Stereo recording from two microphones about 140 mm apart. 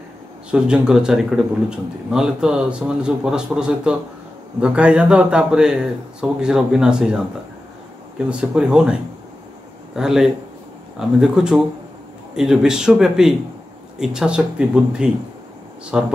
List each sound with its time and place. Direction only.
0.5 s a man's voice: 5° right (ahead or behind)
8.3 s a man's voice: 5° right (ahead or behind)